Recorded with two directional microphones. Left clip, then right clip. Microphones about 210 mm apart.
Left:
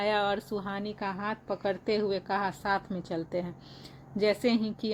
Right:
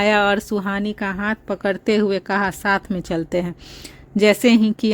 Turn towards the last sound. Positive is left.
turn(degrees=-50)  # may be behind; listen again after turning